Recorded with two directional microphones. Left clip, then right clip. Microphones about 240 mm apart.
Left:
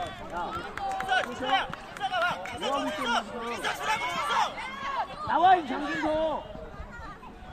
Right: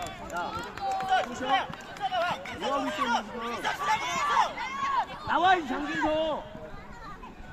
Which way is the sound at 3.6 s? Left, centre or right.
Left.